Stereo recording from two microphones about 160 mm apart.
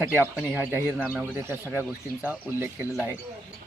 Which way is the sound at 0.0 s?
15° right (ahead or behind).